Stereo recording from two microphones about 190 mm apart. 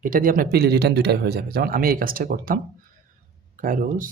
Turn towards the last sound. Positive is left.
turn(degrees=-45)  # may be behind; listen again after turning